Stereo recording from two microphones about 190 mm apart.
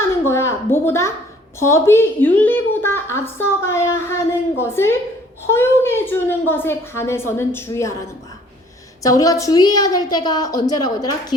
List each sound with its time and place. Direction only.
0.3 s a woman's voice: 15° left (ahead or behind)
9.0 s a woman's voice: 20° left (ahead or behind)